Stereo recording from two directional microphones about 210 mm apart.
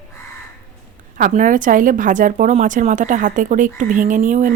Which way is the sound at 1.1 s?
40° right (ahead or behind).